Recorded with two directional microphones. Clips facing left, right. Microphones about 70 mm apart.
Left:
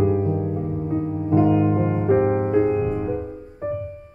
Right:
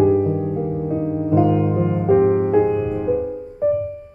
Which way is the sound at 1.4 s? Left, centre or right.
Centre.